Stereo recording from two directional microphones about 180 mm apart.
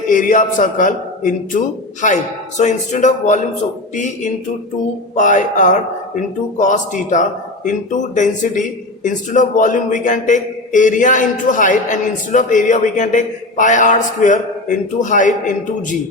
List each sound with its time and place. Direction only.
0.1 s a man's voice: 45° left (ahead or behind)